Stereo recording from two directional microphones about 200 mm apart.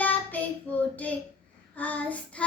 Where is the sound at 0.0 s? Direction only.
10° left (ahead or behind).